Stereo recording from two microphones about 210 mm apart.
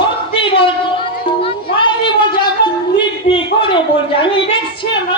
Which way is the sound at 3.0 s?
25° left (ahead or behind).